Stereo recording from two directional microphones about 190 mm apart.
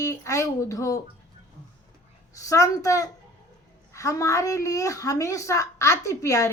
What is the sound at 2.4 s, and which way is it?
A woman's voice, 15° left (ahead or behind).